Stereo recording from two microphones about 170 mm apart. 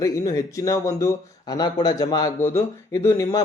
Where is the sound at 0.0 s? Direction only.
20° left (ahead or behind).